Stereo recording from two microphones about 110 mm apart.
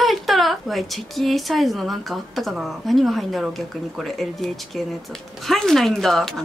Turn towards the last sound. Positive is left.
turn(degrees=5)  # may be behind; listen again after turning